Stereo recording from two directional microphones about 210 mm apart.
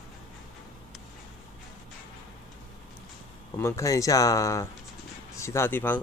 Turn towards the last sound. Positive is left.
turn(degrees=10)  # may be behind; listen again after turning